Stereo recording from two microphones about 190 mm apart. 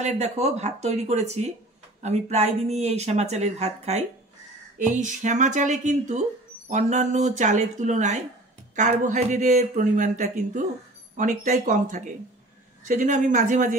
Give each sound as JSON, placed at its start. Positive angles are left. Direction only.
{"t": 0.0, "sound": "speech", "side_deg": -35}